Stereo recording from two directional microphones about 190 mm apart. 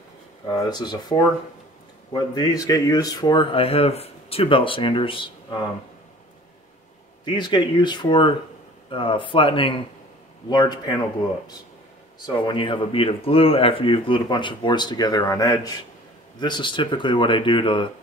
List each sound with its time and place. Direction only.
0.5 s speech: 20° left (ahead or behind)
7.2 s speech: 25° left (ahead or behind)
12.2 s speech: 25° left (ahead or behind)